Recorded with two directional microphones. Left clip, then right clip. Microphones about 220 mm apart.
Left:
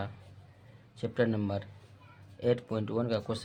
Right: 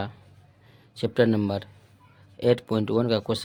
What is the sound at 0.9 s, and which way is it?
Speech, 45° right (ahead or behind).